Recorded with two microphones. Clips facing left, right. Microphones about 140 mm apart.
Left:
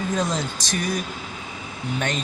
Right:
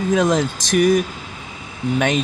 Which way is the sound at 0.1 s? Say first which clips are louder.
Right 11 dB; 90° right.